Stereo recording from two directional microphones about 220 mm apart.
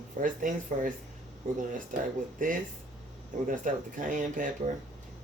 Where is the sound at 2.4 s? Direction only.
35° right (ahead or behind).